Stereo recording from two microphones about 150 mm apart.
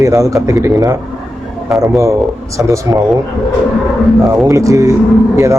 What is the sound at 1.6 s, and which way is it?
Speech, centre (ahead or behind).